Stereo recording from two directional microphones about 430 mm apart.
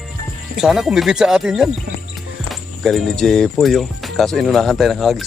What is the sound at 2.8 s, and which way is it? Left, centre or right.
Speech, centre.